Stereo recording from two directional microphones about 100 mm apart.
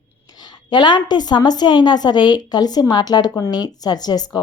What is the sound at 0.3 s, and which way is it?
A woman's voice, 45° left (ahead or behind).